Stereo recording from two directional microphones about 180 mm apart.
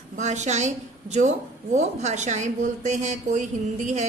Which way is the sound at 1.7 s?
40° right (ahead or behind).